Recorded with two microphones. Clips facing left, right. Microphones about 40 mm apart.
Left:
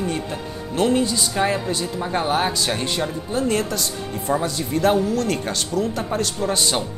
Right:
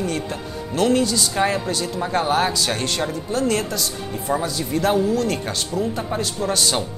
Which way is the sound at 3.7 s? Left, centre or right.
Left.